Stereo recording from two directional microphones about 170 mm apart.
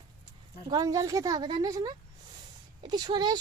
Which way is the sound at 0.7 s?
20° right (ahead or behind).